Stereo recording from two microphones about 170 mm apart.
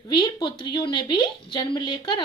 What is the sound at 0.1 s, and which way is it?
A woman's voice, 30° left (ahead or behind).